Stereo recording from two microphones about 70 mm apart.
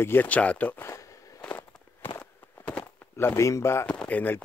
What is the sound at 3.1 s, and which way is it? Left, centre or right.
Speech, left.